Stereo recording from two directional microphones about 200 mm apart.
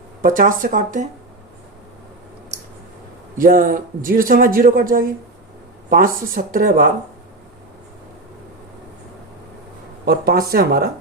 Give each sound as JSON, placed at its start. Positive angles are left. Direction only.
{"t": 0.2, "sound": "speech", "side_deg": -45}
{"t": 3.3, "sound": "speech", "side_deg": -45}
{"t": 10.1, "sound": "speech", "side_deg": -50}